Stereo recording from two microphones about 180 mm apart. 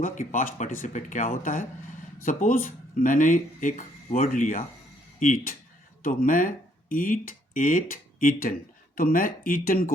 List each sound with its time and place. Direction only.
0.0 s speech: 45° left (ahead or behind)